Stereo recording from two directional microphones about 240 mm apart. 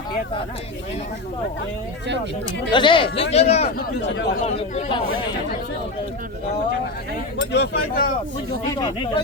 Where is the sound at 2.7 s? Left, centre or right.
Left.